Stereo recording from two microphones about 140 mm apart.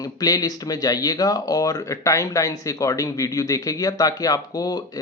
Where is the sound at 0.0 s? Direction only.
25° left (ahead or behind).